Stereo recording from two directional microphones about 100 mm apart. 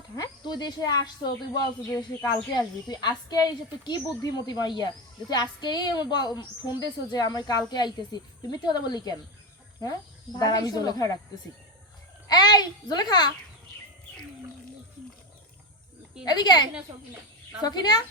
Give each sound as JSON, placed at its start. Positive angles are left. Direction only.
{"t": 0.2, "sound": "speech", "side_deg": 45}
{"t": 10.3, "sound": "speech", "side_deg": 40}
{"t": 12.3, "sound": "a child's voice", "side_deg": 45}
{"t": 16.2, "sound": "speech", "side_deg": 45}